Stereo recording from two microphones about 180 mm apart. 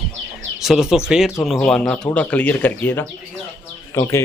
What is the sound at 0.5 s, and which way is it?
Speech, centre (ahead or behind).